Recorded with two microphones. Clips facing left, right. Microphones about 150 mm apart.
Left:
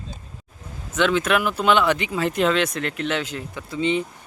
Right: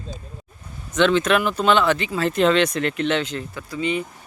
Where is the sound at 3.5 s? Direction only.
20° left (ahead or behind).